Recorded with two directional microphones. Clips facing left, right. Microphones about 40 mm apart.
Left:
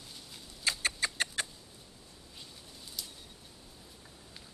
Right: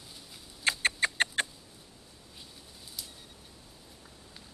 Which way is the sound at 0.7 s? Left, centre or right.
Right.